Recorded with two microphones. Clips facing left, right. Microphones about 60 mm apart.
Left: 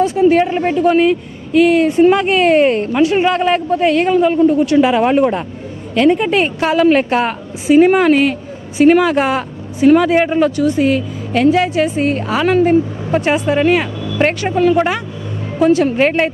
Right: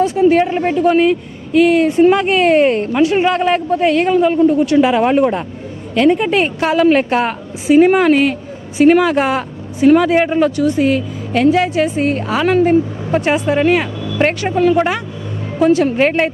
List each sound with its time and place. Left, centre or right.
0.0 s a man's voice: centre